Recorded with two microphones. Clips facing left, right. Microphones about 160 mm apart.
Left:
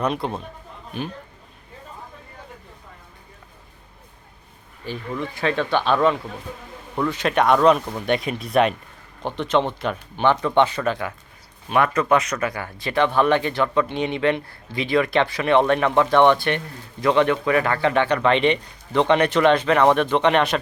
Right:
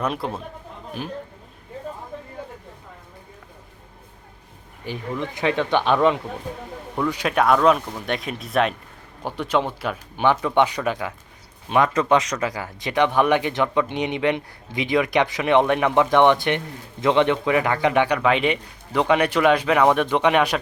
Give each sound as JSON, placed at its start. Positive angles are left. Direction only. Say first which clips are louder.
{"t": 0.0, "sound": "speech", "louder": "left 2 dB", "side_deg": -5}
{"t": 4.8, "sound": "speech", "louder": "even", "side_deg": -15}